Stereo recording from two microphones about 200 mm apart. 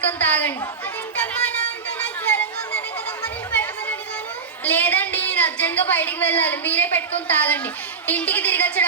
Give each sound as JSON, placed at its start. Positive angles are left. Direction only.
{"t": 0.2, "sound": "a woman's voice", "side_deg": 10}
{"t": 1.2, "sound": "music", "side_deg": 5}
{"t": 2.0, "sound": "a sound", "side_deg": 5}
{"t": 4.6, "sound": "a woman's voice", "side_deg": 10}